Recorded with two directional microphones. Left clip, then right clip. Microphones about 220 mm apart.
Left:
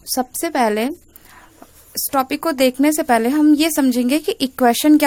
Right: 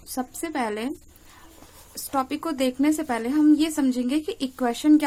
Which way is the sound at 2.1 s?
40° left (ahead or behind).